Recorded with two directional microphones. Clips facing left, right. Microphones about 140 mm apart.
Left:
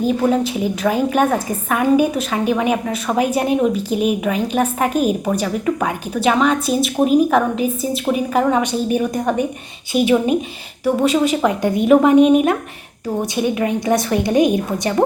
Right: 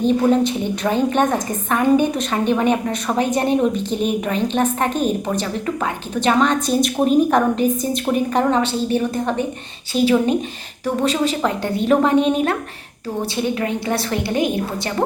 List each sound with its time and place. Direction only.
0.0 s a woman's voice: 5° left (ahead or behind)